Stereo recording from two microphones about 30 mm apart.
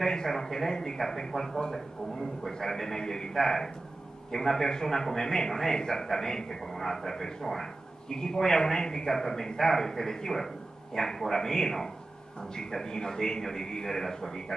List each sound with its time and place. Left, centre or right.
0.0 s a man's voice: centre
3.3 s a man's voice: centre